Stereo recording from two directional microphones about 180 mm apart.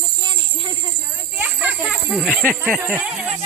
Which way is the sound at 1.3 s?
10° right (ahead or behind).